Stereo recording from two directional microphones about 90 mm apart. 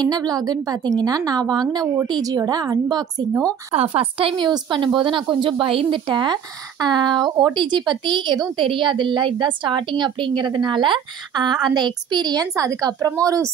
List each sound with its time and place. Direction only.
0.0 s a woman's voice: 45° right (ahead or behind)
3.7 s speech: 90° right
6.0 s a woman's voice: 55° right (ahead or behind); by 13.5 s 40° right (ahead or behind)